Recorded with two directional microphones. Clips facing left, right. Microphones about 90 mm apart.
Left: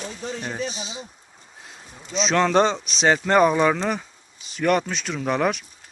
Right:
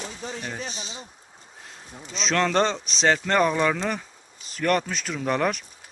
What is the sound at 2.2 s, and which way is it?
Speech, 5° left (ahead or behind).